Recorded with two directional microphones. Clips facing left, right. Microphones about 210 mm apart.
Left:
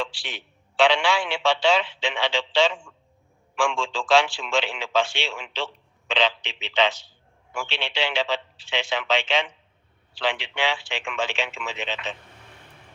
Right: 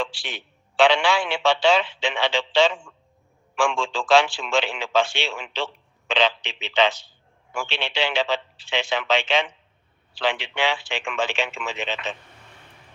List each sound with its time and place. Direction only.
0.0 s a man's voice: 50° right (ahead or behind)